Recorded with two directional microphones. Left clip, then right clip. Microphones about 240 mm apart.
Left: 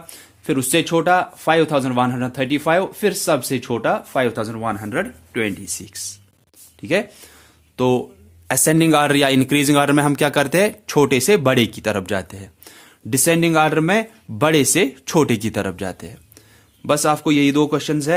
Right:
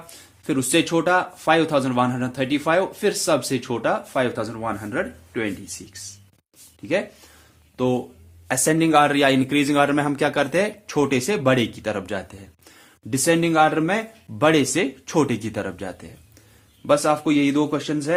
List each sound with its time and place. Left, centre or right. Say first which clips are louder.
0.1 s a man's voice: left 4 dB; left
7.8 s a man's voice: left 5 dB; left